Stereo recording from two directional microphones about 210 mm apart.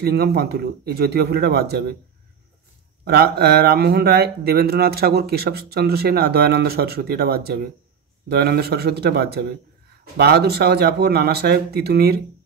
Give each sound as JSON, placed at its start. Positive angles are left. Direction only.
{"t": 0.0, "sound": "speech", "side_deg": -50}
{"t": 3.1, "sound": "speech", "side_deg": -50}